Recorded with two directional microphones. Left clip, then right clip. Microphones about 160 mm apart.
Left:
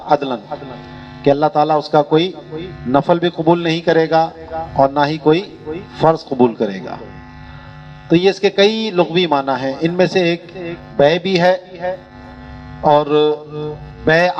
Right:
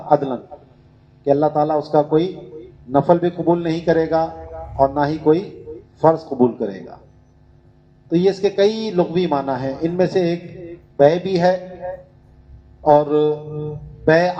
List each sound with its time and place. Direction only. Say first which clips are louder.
0.1 s a man's voice: left 1 dB; 20° left (ahead or behind)
8.4 s a man's voice: left 3 dB; 20° left (ahead or behind)